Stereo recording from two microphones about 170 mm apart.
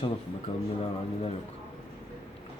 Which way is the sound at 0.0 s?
35° left (ahead or behind).